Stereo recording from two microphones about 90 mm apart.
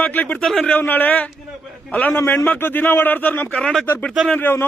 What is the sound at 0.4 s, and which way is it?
Speech, centre (ahead or behind).